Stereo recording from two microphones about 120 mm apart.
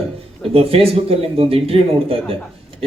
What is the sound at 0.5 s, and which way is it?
Speech, 55° right (ahead or behind).